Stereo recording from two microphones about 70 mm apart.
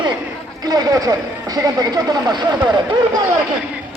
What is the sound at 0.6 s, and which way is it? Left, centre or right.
Speech, right.